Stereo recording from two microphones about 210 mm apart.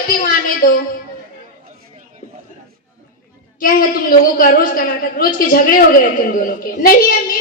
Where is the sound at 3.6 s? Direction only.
45° left (ahead or behind).